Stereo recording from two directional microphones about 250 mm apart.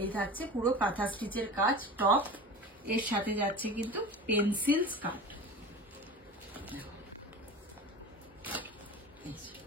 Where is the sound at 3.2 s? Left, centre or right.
Centre.